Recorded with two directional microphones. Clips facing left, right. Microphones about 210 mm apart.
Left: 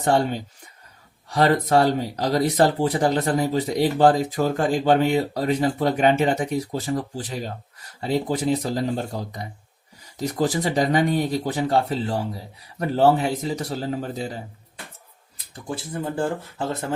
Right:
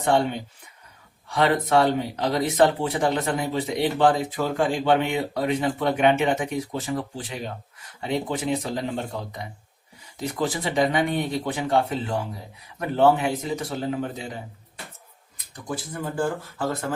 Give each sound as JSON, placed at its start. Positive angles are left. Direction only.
{"t": 0.0, "sound": "speech", "side_deg": 40}
{"t": 15.6, "sound": "speech", "side_deg": 30}